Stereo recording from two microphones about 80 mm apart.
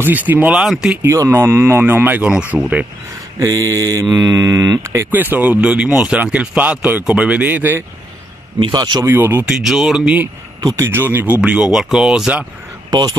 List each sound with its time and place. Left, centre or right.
0.0 s speech: right
0.6 s speech: centre
1.0 s speech: right; by 2.6 s centre
3.3 s speech: right
5.1 s speech: right
8.5 s a man's voice: right
9.0 s speech: right
9.6 s speech: centre
10.6 s a man's voice: right
10.9 s speech: right
11.4 s speech: centre
12.9 s a man's voice: right